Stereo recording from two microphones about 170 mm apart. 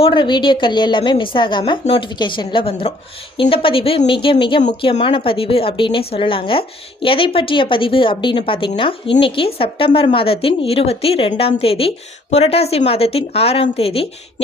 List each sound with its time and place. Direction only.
0.0 s a woman's voice: 30° left (ahead or behind)